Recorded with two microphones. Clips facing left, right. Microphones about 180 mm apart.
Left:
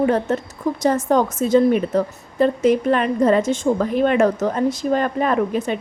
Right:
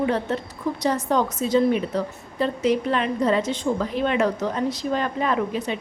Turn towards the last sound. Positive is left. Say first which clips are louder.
# left 4 dB
turn(degrees=50)  # may be behind; listen again after turning